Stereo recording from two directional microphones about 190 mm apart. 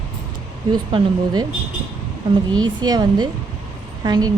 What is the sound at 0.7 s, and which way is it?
Speech, 25° right (ahead or behind).